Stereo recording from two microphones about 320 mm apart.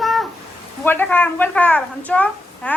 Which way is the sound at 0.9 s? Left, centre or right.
Centre.